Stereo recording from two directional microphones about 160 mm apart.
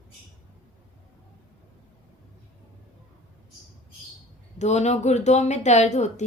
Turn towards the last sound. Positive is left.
turn(degrees=45)  # may be behind; listen again after turning